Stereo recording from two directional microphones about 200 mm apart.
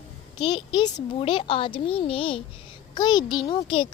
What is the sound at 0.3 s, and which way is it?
A child's voice, 25° left (ahead or behind).